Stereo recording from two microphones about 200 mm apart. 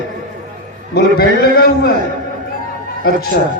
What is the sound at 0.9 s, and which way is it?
Speech, 50° left (ahead or behind).